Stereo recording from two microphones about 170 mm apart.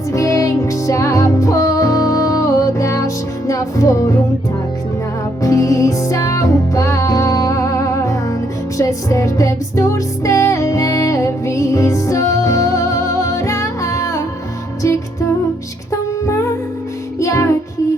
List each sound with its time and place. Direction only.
0.1 s music: 20° left (ahead or behind)
5.4 s music: 20° left (ahead or behind)
17.2 s music: 15° left (ahead or behind)